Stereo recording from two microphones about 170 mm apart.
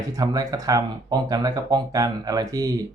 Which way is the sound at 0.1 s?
20° right (ahead or behind).